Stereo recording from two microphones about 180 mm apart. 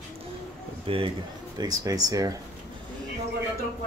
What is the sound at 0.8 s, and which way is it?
Speech, 30° right (ahead or behind).